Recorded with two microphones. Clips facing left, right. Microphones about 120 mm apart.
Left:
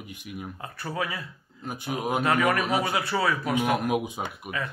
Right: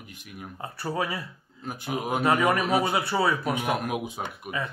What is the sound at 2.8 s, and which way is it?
Speech, 25° right (ahead or behind).